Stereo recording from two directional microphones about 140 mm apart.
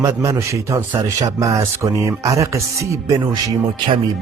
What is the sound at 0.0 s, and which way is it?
Speech, 20° right (ahead or behind).